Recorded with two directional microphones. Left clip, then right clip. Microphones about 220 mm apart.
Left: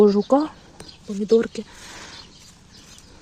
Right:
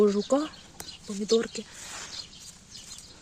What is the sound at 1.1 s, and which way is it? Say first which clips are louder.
Speech: left 7 dB; 10° left (ahead or behind).